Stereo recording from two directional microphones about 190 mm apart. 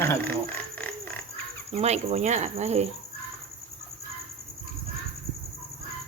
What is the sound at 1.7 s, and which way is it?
Cricket, 35° right (ahead or behind).